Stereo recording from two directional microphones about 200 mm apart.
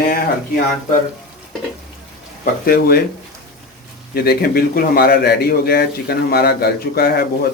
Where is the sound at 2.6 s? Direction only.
50° left (ahead or behind).